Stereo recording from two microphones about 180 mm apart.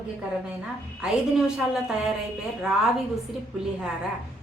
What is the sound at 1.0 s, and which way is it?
Speech, 5° right (ahead or behind).